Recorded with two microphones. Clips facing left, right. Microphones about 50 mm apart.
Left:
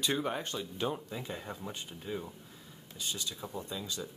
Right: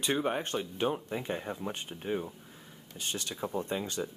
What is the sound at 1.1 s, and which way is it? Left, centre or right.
Speech, right.